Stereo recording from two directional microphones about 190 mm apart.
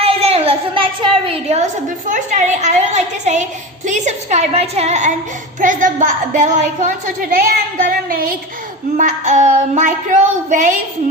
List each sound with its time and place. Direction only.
0.0 s a sound: 30° right (ahead or behind)
2.0 s child singing: 40° right (ahead or behind)
5.5 s a woman's voice: 45° right (ahead or behind)
9.0 s child singing: 40° right (ahead or behind)